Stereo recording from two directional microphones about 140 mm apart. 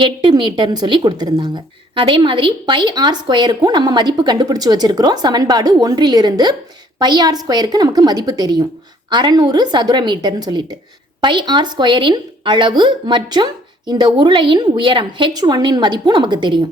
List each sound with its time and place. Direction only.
0.0 s a woman's voice: 35° right (ahead or behind)